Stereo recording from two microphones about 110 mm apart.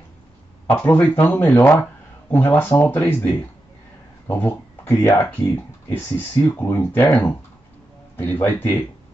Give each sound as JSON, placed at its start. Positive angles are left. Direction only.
{"t": 0.7, "sound": "speech", "side_deg": 15}
{"t": 4.5, "sound": "speech", "side_deg": 25}